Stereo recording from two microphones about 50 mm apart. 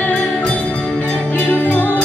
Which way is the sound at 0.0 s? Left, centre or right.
Left.